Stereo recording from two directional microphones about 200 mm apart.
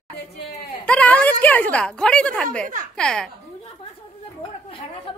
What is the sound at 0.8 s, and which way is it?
A woman's voice, 5° left (ahead or behind).